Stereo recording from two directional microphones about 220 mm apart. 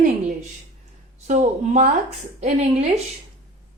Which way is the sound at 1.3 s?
30° right (ahead or behind).